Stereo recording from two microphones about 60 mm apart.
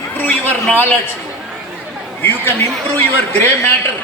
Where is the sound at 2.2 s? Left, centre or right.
Left.